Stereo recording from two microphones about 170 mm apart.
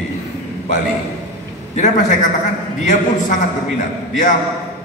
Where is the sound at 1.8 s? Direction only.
45° left (ahead or behind).